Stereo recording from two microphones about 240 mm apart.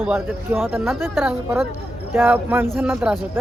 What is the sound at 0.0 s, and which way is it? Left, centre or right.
Speech, centre.